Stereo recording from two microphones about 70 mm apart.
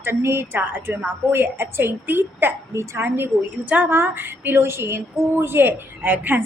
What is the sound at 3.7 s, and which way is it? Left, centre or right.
A woman's voice, right.